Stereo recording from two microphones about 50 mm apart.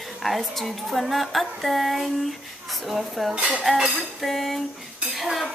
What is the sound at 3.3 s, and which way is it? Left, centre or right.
Dishes, centre.